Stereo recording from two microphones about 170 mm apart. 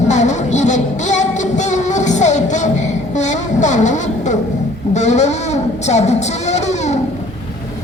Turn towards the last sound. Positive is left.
turn(degrees=40)  # may be behind; listen again after turning